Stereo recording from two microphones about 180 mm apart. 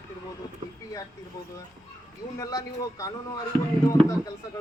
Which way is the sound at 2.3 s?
20° left (ahead or behind).